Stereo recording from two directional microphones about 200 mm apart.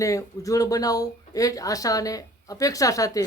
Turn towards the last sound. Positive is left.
turn(degrees=15)  # may be behind; listen again after turning